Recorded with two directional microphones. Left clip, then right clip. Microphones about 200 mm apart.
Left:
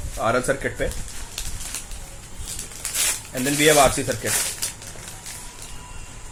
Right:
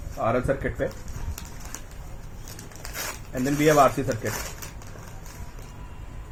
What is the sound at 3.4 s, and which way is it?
Speech, 20° left (ahead or behind).